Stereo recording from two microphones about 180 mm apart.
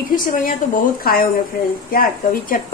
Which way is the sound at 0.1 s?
50° left (ahead or behind).